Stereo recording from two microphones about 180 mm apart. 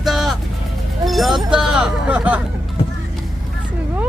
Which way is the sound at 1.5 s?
5° right (ahead or behind).